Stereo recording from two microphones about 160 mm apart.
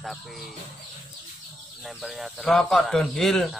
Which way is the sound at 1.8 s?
Centre (ahead or behind).